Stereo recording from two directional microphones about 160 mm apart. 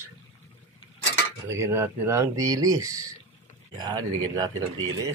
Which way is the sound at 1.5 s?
15° right (ahead or behind).